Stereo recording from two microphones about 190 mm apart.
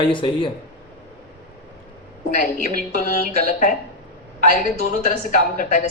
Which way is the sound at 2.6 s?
45° left (ahead or behind).